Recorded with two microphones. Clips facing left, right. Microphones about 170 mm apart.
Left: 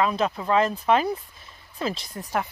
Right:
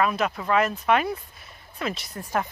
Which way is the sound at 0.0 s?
25° left (ahead or behind).